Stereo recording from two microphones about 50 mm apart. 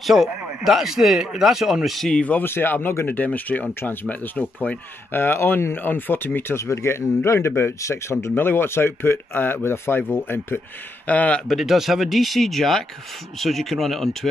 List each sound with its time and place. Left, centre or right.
0.0 s speech: centre
2.4 s speech: left
5.8 s speech: left
6.6 s speech: left
8.4 s speech: left
11.1 s speech: left
11.4 s speech: centre